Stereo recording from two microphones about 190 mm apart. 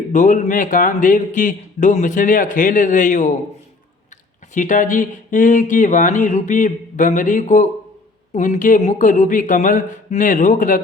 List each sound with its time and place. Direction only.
0.1 s a man's voice: 40° left (ahead or behind)
4.5 s a man's voice: 45° left (ahead or behind)